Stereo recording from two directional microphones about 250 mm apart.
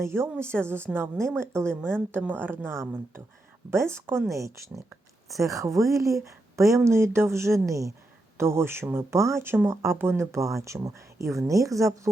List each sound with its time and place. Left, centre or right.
0.0 s speech: centre